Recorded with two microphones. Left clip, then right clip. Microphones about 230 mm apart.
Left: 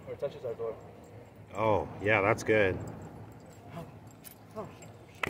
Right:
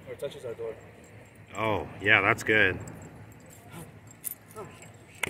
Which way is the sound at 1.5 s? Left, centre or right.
Centre.